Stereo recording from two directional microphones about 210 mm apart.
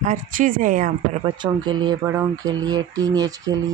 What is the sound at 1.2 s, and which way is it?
Speech, 20° right (ahead or behind).